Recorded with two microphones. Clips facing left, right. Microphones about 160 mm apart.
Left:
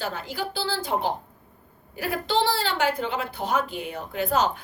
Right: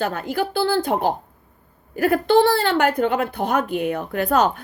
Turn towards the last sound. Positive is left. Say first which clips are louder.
# right 5 dB
turn(degrees=-55)  # may be behind; listen again after turning